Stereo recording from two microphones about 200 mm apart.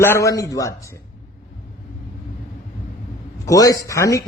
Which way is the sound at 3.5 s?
15° left (ahead or behind).